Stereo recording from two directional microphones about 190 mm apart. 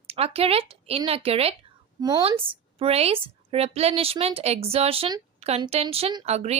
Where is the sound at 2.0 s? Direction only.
20° right (ahead or behind).